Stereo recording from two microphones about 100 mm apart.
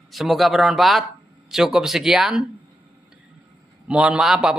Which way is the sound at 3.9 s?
10° right (ahead or behind).